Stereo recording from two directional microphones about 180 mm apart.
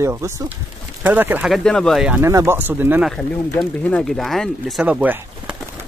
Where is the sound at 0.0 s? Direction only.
15° right (ahead or behind).